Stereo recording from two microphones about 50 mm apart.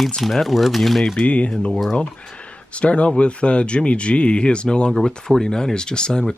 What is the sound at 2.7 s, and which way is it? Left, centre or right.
Speech, left.